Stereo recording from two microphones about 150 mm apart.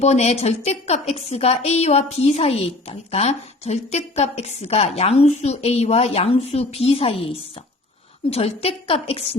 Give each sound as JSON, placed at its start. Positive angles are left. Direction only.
{"t": 0.0, "sound": "a woman's voice", "side_deg": 45}
{"t": 8.3, "sound": "a woman's voice", "side_deg": 40}